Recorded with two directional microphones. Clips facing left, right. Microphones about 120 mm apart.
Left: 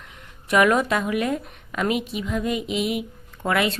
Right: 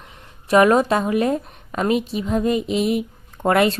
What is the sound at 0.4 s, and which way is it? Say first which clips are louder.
A woman's voice: right 4 dB; 30° right (ahead or behind).